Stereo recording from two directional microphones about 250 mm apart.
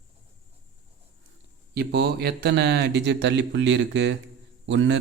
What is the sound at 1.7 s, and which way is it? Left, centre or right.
A man's voice, right.